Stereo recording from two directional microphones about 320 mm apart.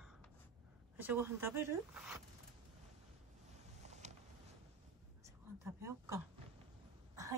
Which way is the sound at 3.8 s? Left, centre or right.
Right.